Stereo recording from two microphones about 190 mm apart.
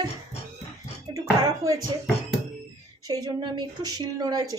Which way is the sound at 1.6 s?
15° right (ahead or behind).